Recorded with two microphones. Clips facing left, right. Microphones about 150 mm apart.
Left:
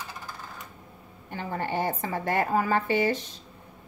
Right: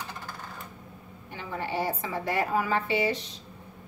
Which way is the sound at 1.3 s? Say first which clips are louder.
Left 2 dB; 45° left (ahead or behind).